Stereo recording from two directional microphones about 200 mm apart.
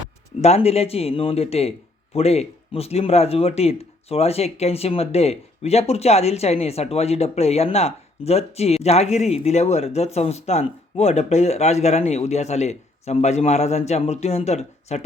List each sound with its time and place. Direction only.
0.4 s speech: 30° left (ahead or behind)